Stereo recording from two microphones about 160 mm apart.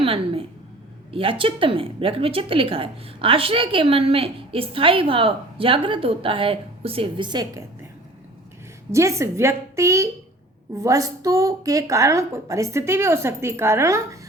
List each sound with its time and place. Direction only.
0.0 s a sound: 35° right (ahead or behind)
1.1 s speech: 35° right (ahead or behind)
8.9 s a woman's voice: 20° right (ahead or behind)